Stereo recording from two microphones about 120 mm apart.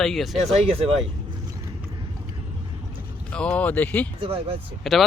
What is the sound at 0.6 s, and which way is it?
Speech, 55° right (ahead or behind).